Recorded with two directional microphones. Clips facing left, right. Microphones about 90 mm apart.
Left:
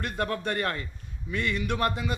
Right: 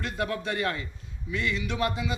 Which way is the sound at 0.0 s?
45° left (ahead or behind).